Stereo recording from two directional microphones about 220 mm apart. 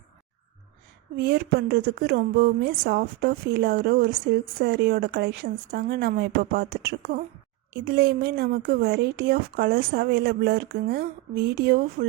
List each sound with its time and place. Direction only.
1.1 s speech: 45° right (ahead or behind)